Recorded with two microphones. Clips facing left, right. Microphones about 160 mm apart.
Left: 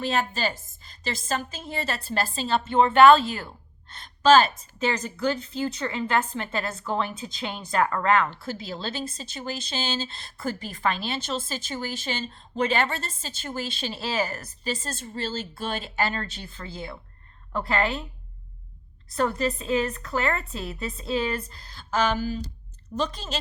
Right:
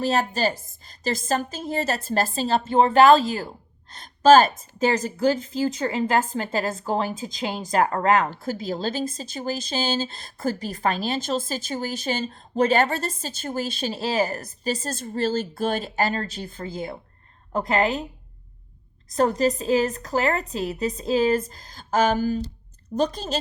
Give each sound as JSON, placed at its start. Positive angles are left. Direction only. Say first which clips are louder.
{"t": 0.0, "sound": "a woman's voice", "louder": "right 4 dB", "side_deg": -40}
{"t": 19.0, "sound": "a woman's voice", "louder": "right 5 dB", "side_deg": -40}